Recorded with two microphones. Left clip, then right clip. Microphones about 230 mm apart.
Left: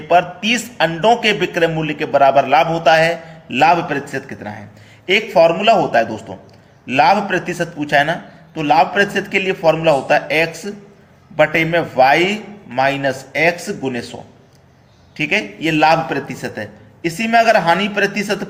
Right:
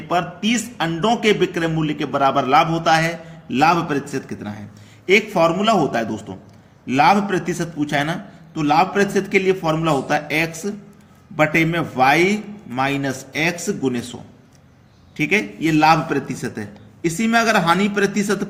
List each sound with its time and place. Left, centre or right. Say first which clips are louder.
0.1 s a man's voice: left 7 dB; centre